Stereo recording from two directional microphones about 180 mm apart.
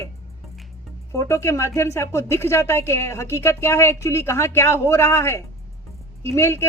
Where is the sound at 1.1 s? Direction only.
15° left (ahead or behind).